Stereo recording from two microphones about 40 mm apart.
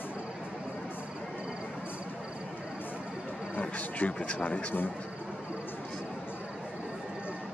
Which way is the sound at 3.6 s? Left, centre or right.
Left.